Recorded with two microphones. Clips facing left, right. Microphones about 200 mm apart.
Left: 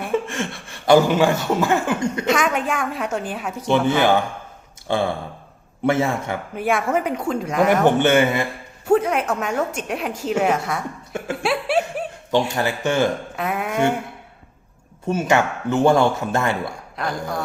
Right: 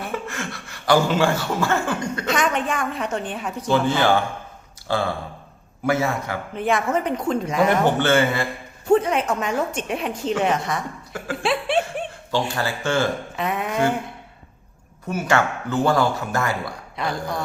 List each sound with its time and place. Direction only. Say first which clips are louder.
0.0 s speech: left 6 dB; 25° left (ahead or behind)
2.3 s a woman's voice: even; 5° left (ahead or behind)
3.6 s speech: left 2 dB; 20° left (ahead or behind)
6.5 s speech: left 1 dB; 5° left (ahead or behind)
7.9 s speech: left 2 dB; 20° left (ahead or behind)
8.9 s a woman's voice: even; 5° left (ahead or behind)
11.4 s chuckle: left 1 dB; 5° left (ahead or behind)
12.3 s speech: left 4 dB; 20° left (ahead or behind)
13.3 s a woman's voice: left 1 dB; 5° left (ahead or behind)
15.0 s speech: left 2 dB; 25° left (ahead or behind)
17.0 s a woman's voice: even; centre (ahead or behind)